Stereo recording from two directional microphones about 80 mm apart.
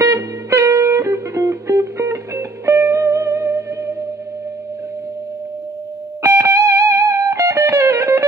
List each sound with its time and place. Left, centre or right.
0.0 s music: right
6.2 s music: right